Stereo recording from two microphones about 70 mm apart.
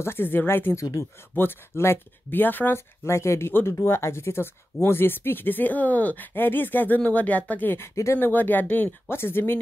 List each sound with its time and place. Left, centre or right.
0.0 s speech: left
3.1 s speech: left
7.9 s speech: left
8.2 s speech: left